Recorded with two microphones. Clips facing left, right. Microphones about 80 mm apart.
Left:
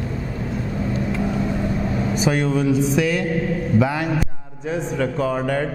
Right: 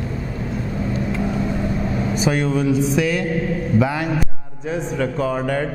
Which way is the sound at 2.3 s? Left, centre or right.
Centre.